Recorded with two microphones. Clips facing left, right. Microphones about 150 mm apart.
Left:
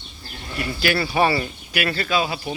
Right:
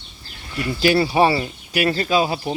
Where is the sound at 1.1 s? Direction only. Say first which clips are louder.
Right 3 dB; 30° right (ahead or behind).